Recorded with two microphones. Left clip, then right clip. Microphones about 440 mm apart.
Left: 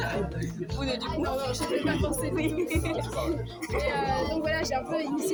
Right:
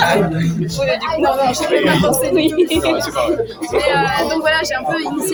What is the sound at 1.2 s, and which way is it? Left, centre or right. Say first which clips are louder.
Speech: right 17 dB; right.